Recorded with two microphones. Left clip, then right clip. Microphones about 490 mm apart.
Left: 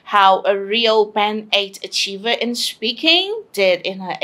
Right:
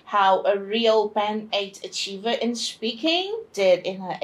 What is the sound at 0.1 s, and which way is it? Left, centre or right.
A woman's voice, left.